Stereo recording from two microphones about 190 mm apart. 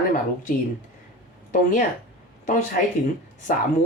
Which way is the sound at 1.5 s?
45° left (ahead or behind).